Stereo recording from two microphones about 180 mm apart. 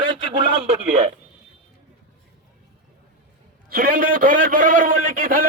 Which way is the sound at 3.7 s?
55° right (ahead or behind).